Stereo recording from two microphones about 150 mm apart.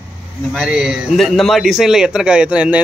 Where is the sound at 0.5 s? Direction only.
5° right (ahead or behind).